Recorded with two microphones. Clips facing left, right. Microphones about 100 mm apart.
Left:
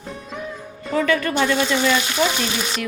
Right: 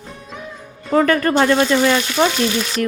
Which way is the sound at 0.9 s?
45° right (ahead or behind).